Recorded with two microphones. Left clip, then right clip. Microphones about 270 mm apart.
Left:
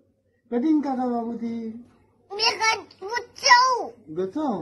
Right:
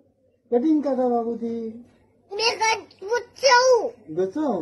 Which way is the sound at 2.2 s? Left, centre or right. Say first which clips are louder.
Right 1 dB; centre.